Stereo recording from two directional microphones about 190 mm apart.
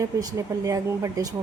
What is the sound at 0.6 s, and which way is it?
Speech, 15° right (ahead or behind).